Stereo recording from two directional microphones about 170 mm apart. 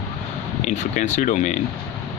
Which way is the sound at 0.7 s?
45° left (ahead or behind).